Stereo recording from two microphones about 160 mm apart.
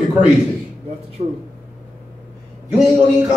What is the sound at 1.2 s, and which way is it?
Speech, 45° right (ahead or behind).